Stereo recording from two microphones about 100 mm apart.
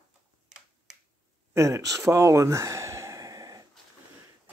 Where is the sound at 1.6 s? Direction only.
30° right (ahead or behind).